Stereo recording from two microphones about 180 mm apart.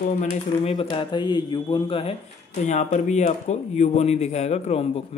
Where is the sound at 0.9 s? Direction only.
25° left (ahead or behind).